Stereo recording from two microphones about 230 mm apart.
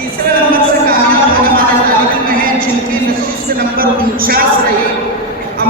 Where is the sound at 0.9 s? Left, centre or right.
Right.